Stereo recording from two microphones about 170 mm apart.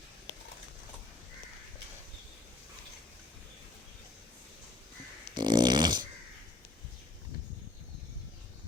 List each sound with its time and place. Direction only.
5.3 s dog: 25° right (ahead or behind)